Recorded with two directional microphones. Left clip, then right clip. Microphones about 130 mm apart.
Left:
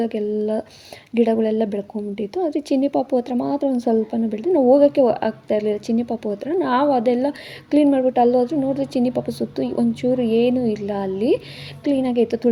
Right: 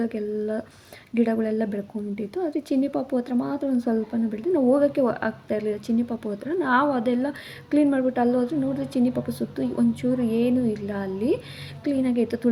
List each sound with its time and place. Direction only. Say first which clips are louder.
0.0 s a woman's voice: left 6 dB; 30° left (ahead or behind)